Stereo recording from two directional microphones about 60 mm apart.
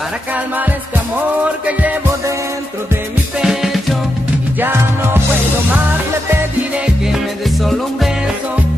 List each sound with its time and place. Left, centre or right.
1.7 s music: right
3.3 s music: centre
4.6 s music: right